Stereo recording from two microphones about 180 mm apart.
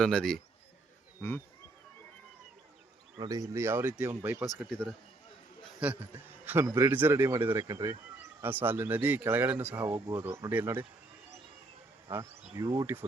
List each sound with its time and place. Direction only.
0.0 s speech: 5° left (ahead or behind)
3.2 s a man's voice: 20° right (ahead or behind)
4.4 s a man's voice: centre (ahead or behind)
12.1 s speech: 15° right (ahead or behind)